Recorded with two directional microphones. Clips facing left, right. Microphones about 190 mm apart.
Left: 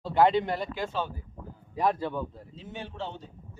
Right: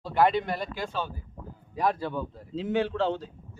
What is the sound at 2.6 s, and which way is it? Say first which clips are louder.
Speech: right 12 dB; 90° right.